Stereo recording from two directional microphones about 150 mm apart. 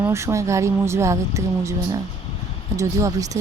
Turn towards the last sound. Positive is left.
turn(degrees=-20)  # may be behind; listen again after turning